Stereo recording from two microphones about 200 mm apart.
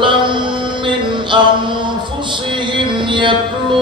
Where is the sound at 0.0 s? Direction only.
25° right (ahead or behind).